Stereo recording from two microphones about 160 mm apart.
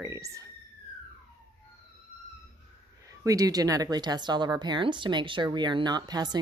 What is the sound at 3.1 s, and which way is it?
Speech, 20° right (ahead or behind).